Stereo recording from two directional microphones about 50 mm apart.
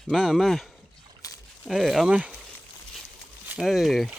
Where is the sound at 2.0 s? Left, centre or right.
Right.